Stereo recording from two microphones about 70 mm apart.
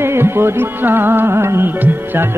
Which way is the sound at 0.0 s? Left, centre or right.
Right.